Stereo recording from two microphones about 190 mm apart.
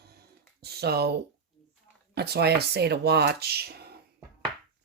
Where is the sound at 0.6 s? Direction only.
55° right (ahead or behind).